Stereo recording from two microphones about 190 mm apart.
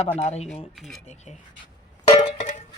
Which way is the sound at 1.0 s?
35° left (ahead or behind).